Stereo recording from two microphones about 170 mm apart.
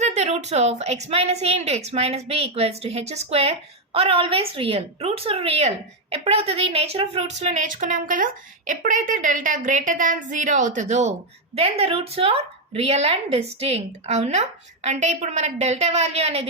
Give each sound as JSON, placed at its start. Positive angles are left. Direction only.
{"t": 0.0, "sound": "a woman's voice", "side_deg": -40}